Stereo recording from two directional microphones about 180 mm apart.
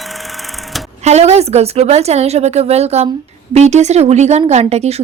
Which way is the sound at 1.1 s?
35° right (ahead or behind).